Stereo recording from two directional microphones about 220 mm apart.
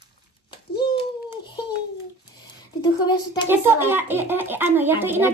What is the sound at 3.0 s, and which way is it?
Speech, 20° left (ahead or behind).